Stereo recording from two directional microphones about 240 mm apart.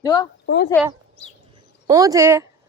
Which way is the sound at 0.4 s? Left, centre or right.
Left.